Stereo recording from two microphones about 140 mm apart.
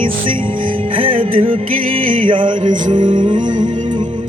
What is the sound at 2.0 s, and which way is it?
Music, 35° right (ahead or behind).